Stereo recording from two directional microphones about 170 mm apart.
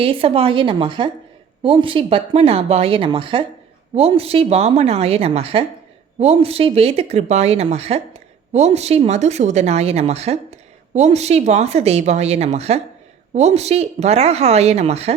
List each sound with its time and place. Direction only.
0.0 s speech: 35° right (ahead or behind)